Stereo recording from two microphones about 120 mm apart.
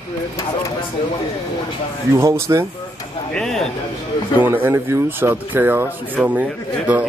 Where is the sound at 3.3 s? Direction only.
5° left (ahead or behind).